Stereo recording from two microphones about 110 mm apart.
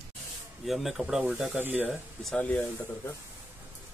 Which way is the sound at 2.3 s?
15° left (ahead or behind).